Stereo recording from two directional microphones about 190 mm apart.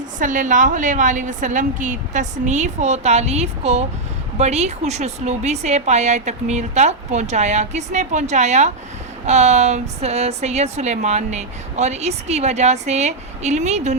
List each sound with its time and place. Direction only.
0.2 s a woman's voice: 40° right (ahead or behind)